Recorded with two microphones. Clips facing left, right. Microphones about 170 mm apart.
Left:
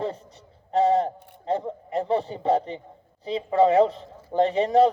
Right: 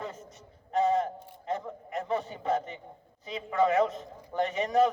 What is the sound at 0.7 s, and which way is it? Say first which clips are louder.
Bleat: left 5 dB; 30° left (ahead or behind).